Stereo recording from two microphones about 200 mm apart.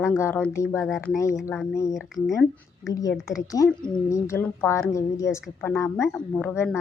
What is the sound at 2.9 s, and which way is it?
A woman's voice, 15° left (ahead or behind).